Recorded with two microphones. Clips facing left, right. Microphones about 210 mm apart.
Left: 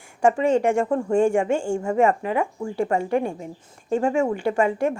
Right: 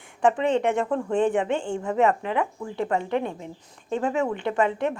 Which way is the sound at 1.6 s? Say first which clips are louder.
Left 4 dB; 45° left (ahead or behind).